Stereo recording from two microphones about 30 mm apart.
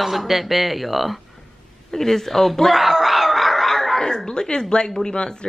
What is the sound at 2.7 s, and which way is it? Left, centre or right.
Snicker, centre.